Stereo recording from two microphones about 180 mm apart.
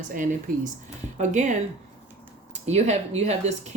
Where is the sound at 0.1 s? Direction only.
45° right (ahead or behind).